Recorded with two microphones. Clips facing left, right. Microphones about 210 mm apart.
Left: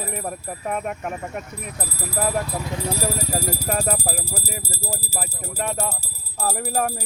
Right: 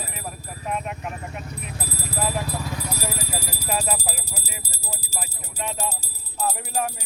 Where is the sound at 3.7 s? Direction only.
50° left (ahead or behind).